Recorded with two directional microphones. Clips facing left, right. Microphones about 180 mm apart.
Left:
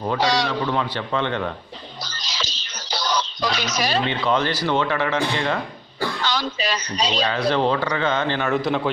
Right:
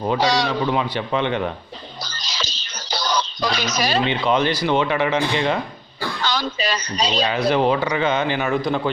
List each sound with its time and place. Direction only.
0.0 s speech: 15° right (ahead or behind)
2.2 s music: 40° right (ahead or behind)
4.0 s speech: 15° right (ahead or behind)
6.2 s speech: 40° right (ahead or behind)
7.2 s speech: 10° right (ahead or behind)
8.5 s a man's voice: centre (ahead or behind)